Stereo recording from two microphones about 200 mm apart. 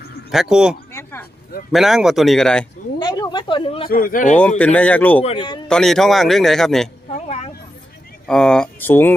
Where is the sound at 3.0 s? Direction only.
20° left (ahead or behind).